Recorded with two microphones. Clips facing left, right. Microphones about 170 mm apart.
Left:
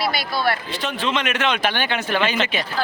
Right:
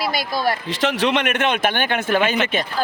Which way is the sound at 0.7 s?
90° right.